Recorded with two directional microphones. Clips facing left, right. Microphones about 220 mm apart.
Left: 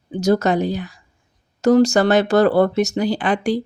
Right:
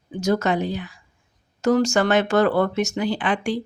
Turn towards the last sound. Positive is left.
turn(degrees=40)  # may be behind; listen again after turning